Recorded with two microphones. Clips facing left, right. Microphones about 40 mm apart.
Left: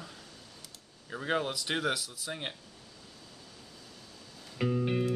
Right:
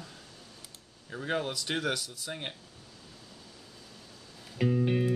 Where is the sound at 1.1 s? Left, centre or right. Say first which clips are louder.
Left 1 dB; centre.